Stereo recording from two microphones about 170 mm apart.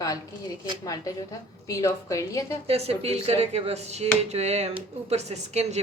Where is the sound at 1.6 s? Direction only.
20° left (ahead or behind).